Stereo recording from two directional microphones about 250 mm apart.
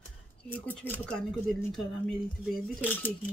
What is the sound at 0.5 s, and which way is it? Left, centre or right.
Speech, centre.